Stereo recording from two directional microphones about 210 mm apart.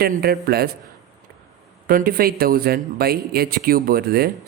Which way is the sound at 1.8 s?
45° right (ahead or behind).